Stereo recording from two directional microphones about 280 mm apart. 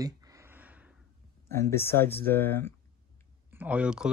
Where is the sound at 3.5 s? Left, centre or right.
Centre.